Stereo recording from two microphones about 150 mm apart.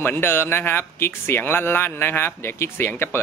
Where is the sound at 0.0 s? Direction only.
15° left (ahead or behind).